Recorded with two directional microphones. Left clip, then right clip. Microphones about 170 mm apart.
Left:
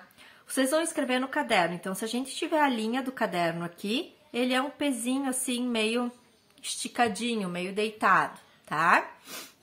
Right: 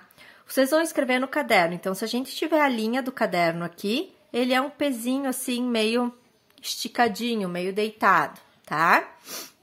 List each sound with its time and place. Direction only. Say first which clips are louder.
0.2 s speech: right 6 dB; 40° right (ahead or behind)